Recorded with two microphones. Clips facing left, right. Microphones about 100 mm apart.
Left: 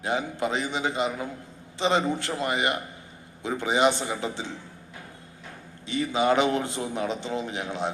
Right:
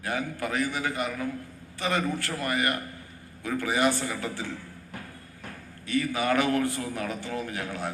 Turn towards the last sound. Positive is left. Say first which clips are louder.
# left 3 dB
turn(degrees=20)  # may be behind; listen again after turning